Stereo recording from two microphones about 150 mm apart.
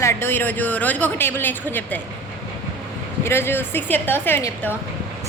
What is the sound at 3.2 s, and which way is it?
A woman's voice, 15° left (ahead or behind).